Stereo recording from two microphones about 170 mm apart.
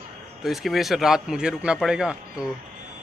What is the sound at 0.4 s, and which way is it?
A man's voice, centre (ahead or behind).